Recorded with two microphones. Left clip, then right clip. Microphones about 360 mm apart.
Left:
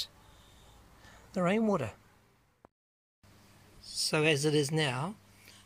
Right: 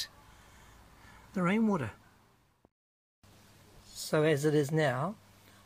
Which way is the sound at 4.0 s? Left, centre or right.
Centre.